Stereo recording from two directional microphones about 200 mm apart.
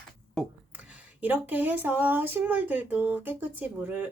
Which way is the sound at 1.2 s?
10° right (ahead or behind).